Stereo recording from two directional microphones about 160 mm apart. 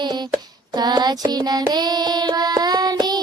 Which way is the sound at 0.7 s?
25° right (ahead or behind).